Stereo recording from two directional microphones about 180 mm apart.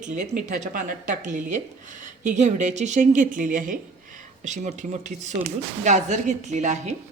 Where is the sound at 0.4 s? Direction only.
45° right (ahead or behind).